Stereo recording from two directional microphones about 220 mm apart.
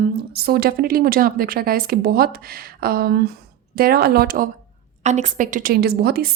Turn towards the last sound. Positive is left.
turn(degrees=-45)  # may be behind; listen again after turning